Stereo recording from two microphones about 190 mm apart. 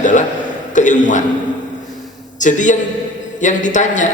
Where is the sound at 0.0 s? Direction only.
40° left (ahead or behind).